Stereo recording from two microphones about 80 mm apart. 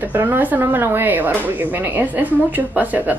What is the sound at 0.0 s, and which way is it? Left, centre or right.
Speech, right.